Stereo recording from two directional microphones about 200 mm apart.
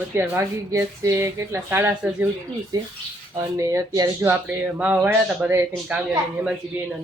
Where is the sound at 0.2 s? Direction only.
10° right (ahead or behind).